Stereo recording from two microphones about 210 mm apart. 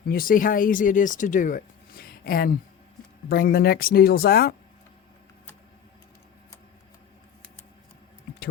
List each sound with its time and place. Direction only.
0.0 s speech: 45° left (ahead or behind)